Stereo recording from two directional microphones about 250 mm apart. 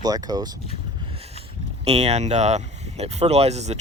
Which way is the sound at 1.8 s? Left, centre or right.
Right.